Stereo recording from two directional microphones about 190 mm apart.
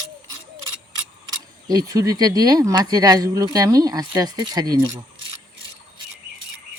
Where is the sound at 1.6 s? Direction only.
20° right (ahead or behind).